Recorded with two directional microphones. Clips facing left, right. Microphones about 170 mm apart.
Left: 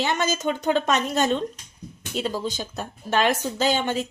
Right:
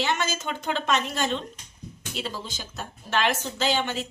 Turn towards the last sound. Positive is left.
turn(degrees=45)  # may be behind; listen again after turning